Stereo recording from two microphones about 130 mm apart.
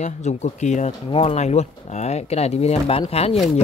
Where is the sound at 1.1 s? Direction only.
50° left (ahead or behind).